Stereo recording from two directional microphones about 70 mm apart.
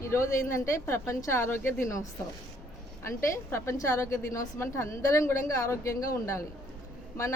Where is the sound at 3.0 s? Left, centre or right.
Left.